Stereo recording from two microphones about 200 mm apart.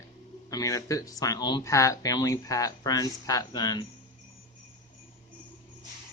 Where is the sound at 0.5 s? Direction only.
15° left (ahead or behind).